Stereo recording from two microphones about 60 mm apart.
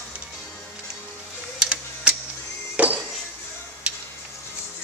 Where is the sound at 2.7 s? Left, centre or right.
Right.